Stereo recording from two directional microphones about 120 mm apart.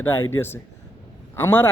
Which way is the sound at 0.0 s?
20° left (ahead or behind).